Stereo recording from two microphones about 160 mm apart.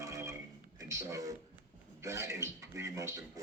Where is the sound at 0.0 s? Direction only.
20° right (ahead or behind).